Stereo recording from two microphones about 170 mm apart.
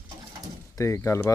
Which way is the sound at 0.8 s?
15° left (ahead or behind).